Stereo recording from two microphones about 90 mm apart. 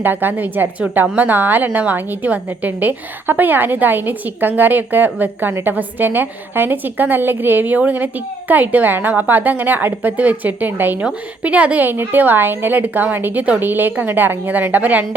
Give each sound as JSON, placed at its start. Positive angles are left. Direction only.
{"t": 0.0, "sound": "a woman's voice", "side_deg": -20}